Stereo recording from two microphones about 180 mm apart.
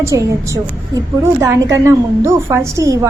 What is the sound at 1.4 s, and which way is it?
A woman's voice, 15° right (ahead or behind).